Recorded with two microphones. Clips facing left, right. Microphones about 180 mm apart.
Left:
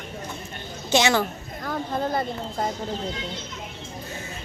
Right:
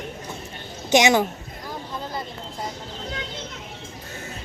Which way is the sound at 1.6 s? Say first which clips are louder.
Left 7 dB; 55° left (ahead or behind).